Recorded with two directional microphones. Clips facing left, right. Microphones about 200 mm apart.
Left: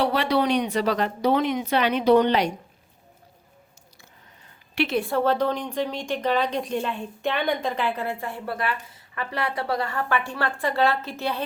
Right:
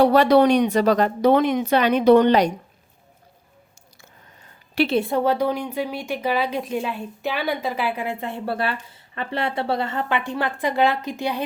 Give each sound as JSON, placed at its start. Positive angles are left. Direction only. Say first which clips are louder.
{"t": 0.0, "sound": "speech", "louder": "right 8 dB", "side_deg": -45}
{"t": 4.7, "sound": "a woman's voice", "louder": "right 4 dB", "side_deg": -35}